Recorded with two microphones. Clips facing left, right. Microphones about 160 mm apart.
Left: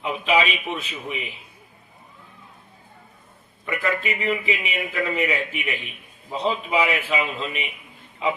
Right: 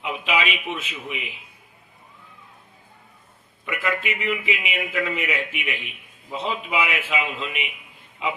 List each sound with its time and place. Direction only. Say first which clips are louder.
0.0 s a man's voice: left 4 dB; 35° left (ahead or behind)
3.7 s a man's voice: left 1 dB; 35° left (ahead or behind)